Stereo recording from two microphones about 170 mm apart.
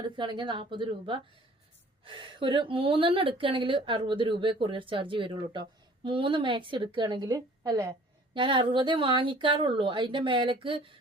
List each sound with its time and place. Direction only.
0.2 s a woman's voice: 30° right (ahead or behind)